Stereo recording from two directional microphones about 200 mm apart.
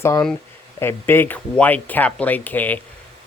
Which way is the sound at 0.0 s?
15° left (ahead or behind).